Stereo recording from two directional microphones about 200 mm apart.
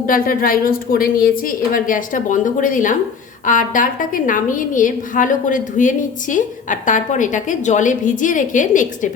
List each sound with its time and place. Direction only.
0.1 s a woman's voice: 45° left (ahead or behind)